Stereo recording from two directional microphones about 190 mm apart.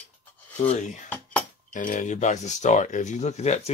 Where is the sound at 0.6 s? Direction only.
35° left (ahead or behind).